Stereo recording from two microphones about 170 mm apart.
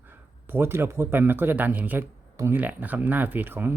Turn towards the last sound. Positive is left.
turn(degrees=-10)  # may be behind; listen again after turning